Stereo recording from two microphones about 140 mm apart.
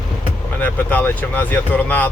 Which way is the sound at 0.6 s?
10° left (ahead or behind).